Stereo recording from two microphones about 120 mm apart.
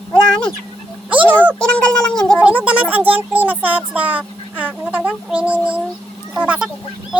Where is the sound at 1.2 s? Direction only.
15° left (ahead or behind).